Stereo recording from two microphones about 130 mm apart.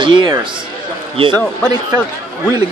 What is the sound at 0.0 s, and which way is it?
Speech, 40° right (ahead or behind).